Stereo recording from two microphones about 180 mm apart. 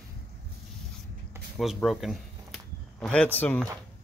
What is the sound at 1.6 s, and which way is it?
Speech, centre (ahead or behind).